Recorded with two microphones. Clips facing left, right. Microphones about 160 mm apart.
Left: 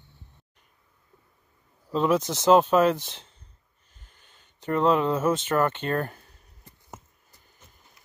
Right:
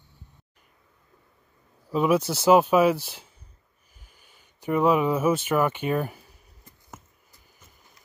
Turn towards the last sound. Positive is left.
turn(degrees=20)  # may be behind; listen again after turning